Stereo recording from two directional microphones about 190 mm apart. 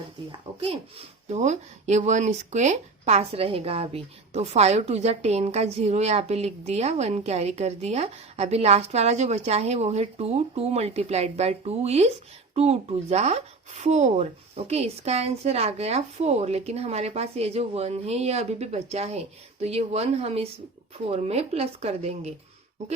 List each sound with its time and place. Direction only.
0.3 s speech: 30° right (ahead or behind)